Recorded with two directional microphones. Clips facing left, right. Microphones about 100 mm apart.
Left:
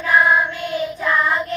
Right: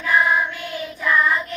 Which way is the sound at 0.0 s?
30° left (ahead or behind).